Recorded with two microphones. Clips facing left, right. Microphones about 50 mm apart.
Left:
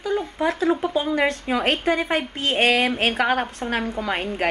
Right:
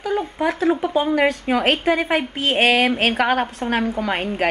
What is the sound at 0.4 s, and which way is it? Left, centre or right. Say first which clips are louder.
Speech: right 2 dB; centre.